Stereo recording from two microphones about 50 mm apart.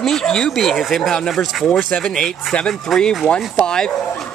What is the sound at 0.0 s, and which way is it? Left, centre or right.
Speech, centre.